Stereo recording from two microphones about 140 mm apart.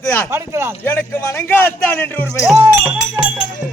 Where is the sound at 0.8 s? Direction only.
15° left (ahead or behind).